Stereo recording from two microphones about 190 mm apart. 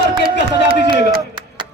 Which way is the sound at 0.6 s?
25° right (ahead or behind).